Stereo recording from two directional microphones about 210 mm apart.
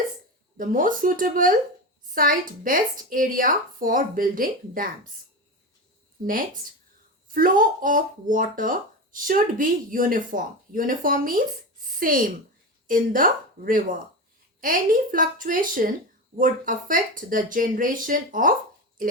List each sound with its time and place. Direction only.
0.5 s speech: 40° right (ahead or behind)
6.2 s speech: 40° right (ahead or behind)
19.0 s a sound: 40° right (ahead or behind)